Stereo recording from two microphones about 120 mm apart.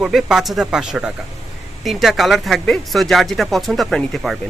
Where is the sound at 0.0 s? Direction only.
5° right (ahead or behind).